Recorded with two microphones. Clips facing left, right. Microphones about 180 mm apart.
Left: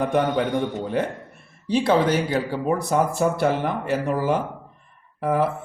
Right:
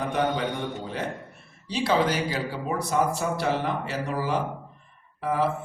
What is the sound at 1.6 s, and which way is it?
A man's voice, 50° left (ahead or behind).